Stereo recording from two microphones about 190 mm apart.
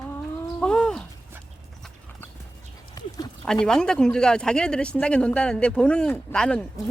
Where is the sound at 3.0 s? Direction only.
20° left (ahead or behind).